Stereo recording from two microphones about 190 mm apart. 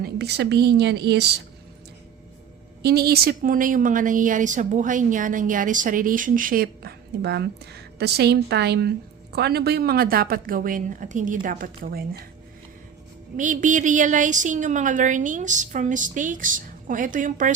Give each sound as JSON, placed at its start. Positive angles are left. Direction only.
{"t": 0.0, "sound": "a woman's voice", "side_deg": -60}
{"t": 2.8, "sound": "a woman's voice", "side_deg": -55}
{"t": 13.3, "sound": "a woman's voice", "side_deg": -40}